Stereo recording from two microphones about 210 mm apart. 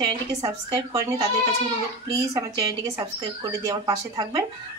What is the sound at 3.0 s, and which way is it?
A woman's voice, 15° right (ahead or behind).